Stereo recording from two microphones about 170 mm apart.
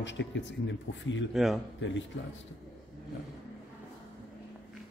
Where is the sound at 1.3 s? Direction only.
Centre (ahead or behind).